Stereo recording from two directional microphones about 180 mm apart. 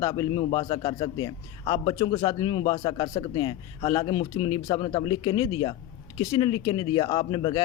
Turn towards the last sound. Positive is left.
turn(degrees=25)  # may be behind; listen again after turning